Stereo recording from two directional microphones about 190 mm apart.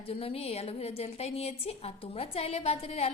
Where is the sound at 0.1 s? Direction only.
30° left (ahead or behind).